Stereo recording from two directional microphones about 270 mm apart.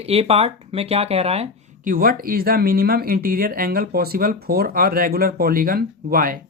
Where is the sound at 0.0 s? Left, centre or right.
Right.